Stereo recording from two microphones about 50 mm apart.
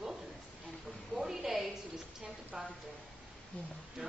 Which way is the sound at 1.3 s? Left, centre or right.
Centre.